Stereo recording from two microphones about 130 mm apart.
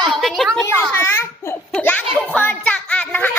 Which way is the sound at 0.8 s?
15° left (ahead or behind).